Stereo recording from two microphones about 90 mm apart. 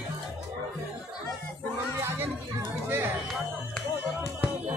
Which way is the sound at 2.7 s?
25° right (ahead or behind).